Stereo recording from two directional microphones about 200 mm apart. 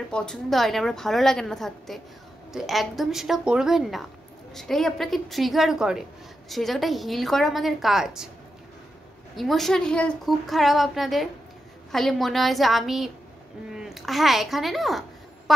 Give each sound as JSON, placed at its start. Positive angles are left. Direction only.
{"t": 0.1, "sound": "a woman's voice", "side_deg": 5}
{"t": 9.3, "sound": "a woman's voice", "side_deg": 0}